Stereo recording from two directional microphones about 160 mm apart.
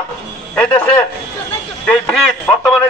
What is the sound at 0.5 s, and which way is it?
A man's voice, 10° left (ahead or behind).